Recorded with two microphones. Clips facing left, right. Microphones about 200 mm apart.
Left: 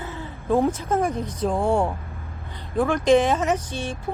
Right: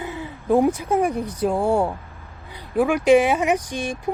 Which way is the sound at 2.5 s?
10° right (ahead or behind).